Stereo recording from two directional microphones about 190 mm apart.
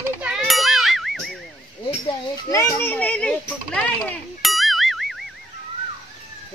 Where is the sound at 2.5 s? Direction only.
15° left (ahead or behind).